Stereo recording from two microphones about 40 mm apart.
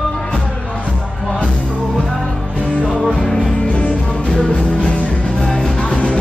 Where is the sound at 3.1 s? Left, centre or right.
Left.